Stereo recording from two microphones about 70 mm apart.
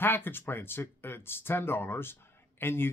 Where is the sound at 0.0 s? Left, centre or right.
Left.